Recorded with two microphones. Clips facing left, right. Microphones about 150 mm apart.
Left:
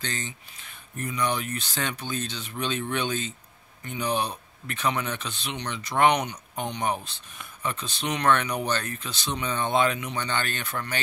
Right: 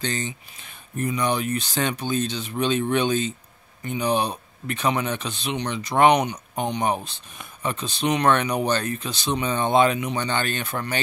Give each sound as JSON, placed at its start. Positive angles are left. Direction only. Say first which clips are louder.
{"t": 0.0, "sound": "speech", "louder": "right 6 dB", "side_deg": -20}